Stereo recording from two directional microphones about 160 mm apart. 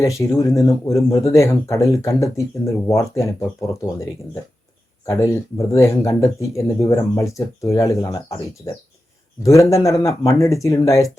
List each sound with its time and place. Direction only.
0.0 s speech: 20° left (ahead or behind)
9.4 s speech: 20° left (ahead or behind)